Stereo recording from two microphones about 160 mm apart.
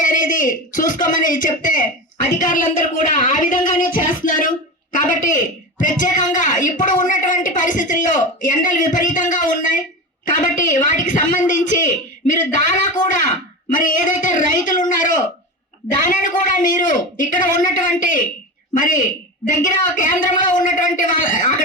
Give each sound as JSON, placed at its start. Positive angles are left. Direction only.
{"t": 0.0, "sound": "a woman's voice", "side_deg": 55}